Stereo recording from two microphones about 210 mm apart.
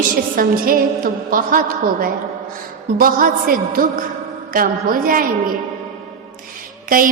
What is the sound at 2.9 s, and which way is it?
A woman's voice, 40° right (ahead or behind).